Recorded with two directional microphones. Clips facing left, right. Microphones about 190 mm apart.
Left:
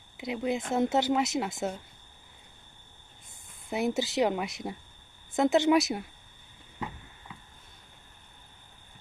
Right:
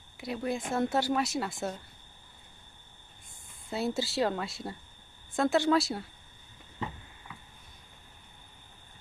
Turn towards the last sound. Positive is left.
turn(degrees=25)  # may be behind; listen again after turning